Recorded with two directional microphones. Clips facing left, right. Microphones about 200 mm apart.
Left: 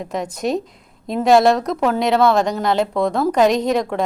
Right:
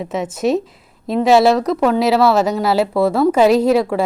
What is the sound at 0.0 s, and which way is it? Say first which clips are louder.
Speech: right 4 dB; 5° right (ahead or behind).